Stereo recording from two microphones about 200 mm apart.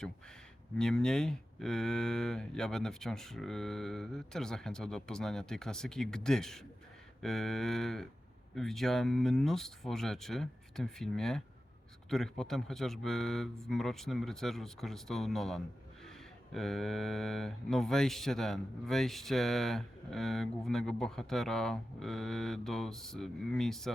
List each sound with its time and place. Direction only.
0.8 s speech: 5° left (ahead or behind)